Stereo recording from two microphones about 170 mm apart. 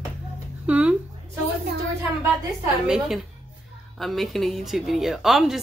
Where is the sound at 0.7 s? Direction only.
10° right (ahead or behind).